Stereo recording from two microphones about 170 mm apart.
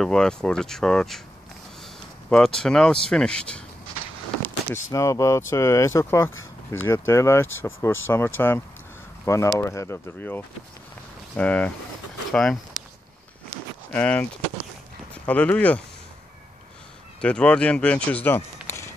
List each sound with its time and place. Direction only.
0.0 s speech: 5° left (ahead or behind)
2.2 s speech: 5° left (ahead or behind)
4.9 s speech: 20° left (ahead or behind); by 12.5 s 5° left (ahead or behind)
13.9 s speech: 10° left (ahead or behind)
15.2 s speech: 5° left (ahead or behind)
17.2 s speech: 5° left (ahead or behind)
18.7 s a sound: 15° left (ahead or behind)